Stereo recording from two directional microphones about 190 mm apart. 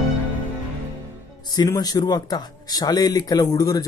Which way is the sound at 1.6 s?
20° left (ahead or behind).